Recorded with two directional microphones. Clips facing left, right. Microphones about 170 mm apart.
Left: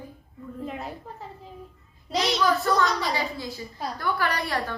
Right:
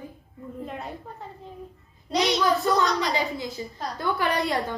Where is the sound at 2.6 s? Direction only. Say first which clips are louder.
Right 1 dB; 20° right (ahead or behind).